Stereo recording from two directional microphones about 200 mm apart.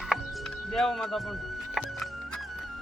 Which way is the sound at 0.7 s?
Centre (ahead or behind).